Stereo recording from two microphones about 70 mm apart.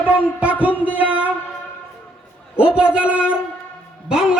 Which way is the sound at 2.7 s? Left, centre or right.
Centre.